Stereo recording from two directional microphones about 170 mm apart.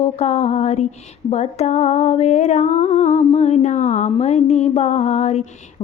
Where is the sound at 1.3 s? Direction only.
40° left (ahead or behind).